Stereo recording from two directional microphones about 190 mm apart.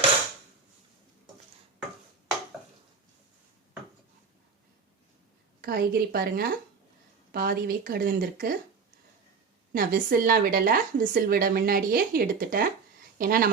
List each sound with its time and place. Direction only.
5.6 s a woman's voice: 55° right (ahead or behind)
9.7 s a woman's voice: 50° right (ahead or behind)